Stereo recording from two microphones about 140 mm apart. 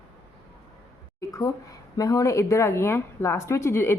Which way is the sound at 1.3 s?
25° left (ahead or behind).